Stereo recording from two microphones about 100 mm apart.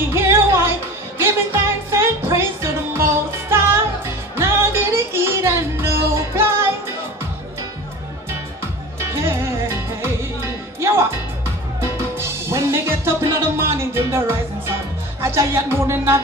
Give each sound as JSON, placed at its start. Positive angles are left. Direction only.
{"t": 0.1, "sound": "music", "side_deg": -25}
{"t": 9.1, "sound": "music", "side_deg": -25}
{"t": 15.2, "sound": "speech", "side_deg": -25}